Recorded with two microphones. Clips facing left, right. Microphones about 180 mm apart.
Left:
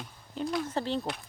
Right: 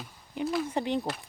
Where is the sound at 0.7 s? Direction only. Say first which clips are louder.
Right 2 dB; 15° right (ahead or behind).